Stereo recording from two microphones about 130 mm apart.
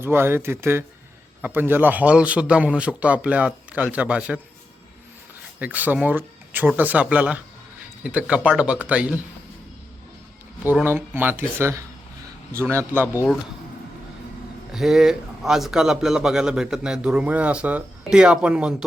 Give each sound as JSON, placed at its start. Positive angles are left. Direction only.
{"t": 0.0, "sound": "a man's voice", "side_deg": -15}
{"t": 5.5, "sound": "a man's voice", "side_deg": -10}
{"t": 10.8, "sound": "a man's voice", "side_deg": -15}
{"t": 14.7, "sound": "a man's voice", "side_deg": -5}